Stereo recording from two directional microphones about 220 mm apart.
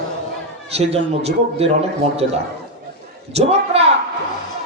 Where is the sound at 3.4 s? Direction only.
30° right (ahead or behind).